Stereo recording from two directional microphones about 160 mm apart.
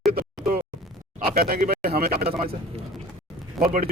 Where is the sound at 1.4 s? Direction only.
65° right (ahead or behind).